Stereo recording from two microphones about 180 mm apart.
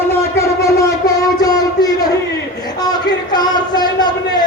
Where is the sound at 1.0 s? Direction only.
20° left (ahead or behind).